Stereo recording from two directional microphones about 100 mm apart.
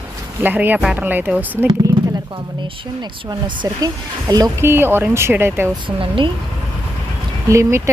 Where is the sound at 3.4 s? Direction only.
50° right (ahead or behind).